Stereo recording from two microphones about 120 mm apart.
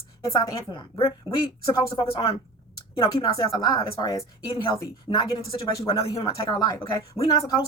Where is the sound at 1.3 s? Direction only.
25° left (ahead or behind).